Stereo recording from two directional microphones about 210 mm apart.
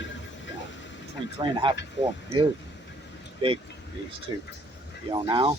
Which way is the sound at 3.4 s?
25° right (ahead or behind).